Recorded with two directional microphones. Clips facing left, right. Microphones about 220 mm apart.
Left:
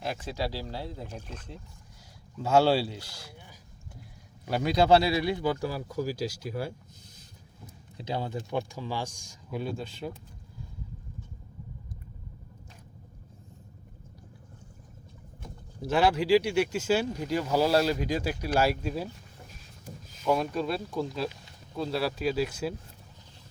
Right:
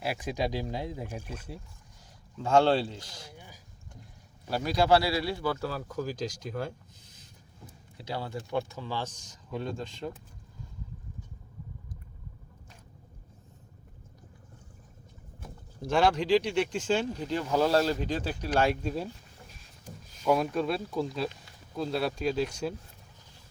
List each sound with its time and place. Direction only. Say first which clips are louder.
0.0 s speech: right 2 dB; 10° right (ahead or behind)
2.4 s speech: left 1 dB; 5° left (ahead or behind)
4.4 s speech: left 2 dB; 20° left (ahead or behind)
7.9 s speech: left 3 dB; 20° left (ahead or behind)
15.4 s speech: left 2 dB; 5° left (ahead or behind)
20.2 s speech: right 1 dB; centre (ahead or behind)